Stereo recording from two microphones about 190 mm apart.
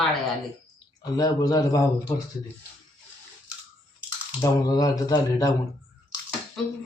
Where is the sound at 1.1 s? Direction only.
20° left (ahead or behind).